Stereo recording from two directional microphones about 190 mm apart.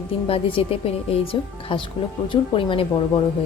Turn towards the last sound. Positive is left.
turn(degrees=25)  # may be behind; listen again after turning